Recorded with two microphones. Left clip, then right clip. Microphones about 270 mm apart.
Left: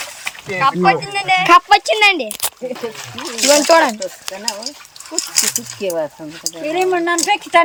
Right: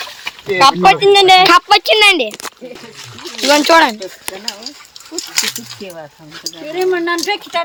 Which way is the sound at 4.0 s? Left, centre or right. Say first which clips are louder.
Left 1 dB; centre.